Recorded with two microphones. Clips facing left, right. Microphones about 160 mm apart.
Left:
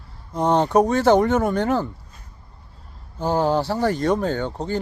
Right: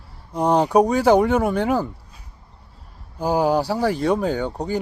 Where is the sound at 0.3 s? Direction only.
10° right (ahead or behind).